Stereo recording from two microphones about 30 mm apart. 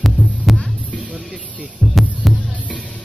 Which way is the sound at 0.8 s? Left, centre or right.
Right.